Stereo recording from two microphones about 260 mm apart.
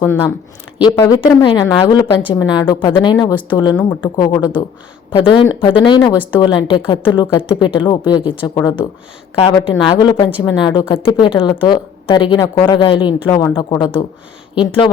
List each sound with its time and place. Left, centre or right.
0.8 s a woman's voice: centre